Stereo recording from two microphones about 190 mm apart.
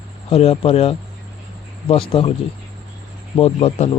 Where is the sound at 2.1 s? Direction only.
30° left (ahead or behind).